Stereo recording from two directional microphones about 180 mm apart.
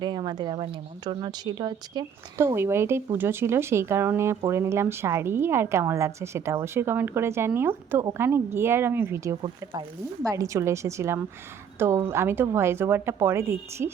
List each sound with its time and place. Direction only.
0.0 s a woman's voice: 25° right (ahead or behind)